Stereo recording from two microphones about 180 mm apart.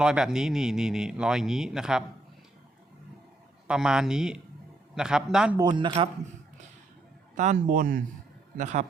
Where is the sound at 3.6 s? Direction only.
5° right (ahead or behind).